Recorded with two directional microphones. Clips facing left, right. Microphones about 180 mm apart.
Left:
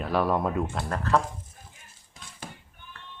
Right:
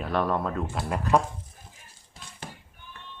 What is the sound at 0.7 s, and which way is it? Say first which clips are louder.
Speech: right 5 dB; 10° right (ahead or behind).